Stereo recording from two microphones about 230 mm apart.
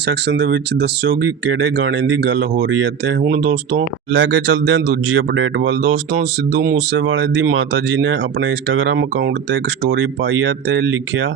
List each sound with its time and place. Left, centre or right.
0.1 s speech: right
6.1 s speech: right